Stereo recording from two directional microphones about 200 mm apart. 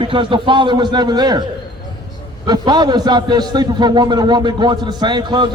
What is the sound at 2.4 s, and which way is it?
A man's voice, 20° right (ahead or behind).